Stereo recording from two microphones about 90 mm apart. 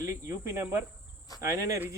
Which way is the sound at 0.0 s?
35° right (ahead or behind).